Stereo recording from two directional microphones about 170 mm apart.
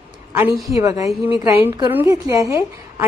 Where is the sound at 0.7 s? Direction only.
20° right (ahead or behind).